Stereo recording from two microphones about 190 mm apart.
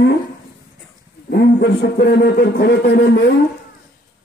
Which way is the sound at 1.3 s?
60° left (ahead or behind).